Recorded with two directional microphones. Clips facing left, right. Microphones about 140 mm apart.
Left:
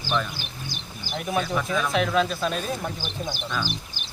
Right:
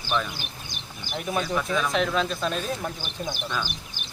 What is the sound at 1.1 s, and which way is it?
Speech, centre (ahead or behind).